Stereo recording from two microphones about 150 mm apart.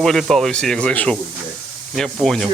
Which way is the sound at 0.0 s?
Centre (ahead or behind).